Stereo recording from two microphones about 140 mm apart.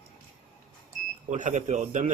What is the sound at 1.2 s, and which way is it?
Speech, 60° right (ahead or behind).